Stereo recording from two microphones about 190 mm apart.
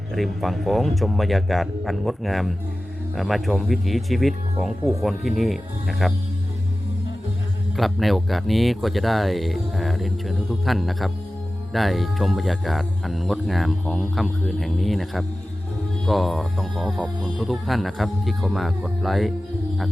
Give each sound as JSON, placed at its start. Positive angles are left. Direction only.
{"t": 0.1, "sound": "speech", "side_deg": 0}
{"t": 7.8, "sound": "speech", "side_deg": 0}